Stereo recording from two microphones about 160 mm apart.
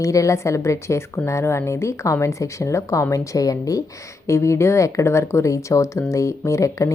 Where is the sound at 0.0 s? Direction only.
20° left (ahead or behind).